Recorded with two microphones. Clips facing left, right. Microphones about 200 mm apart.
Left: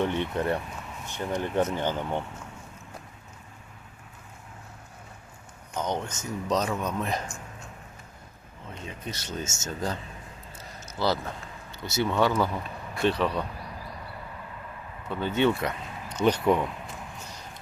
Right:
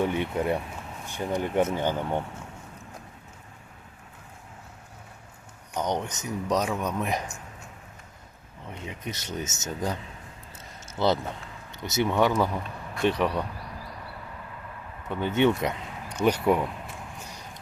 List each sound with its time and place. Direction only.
0.0 s speech: 10° right (ahead or behind)
5.7 s speech: 15° right (ahead or behind)
8.6 s speech: 20° right (ahead or behind)
15.1 s speech: 20° right (ahead or behind)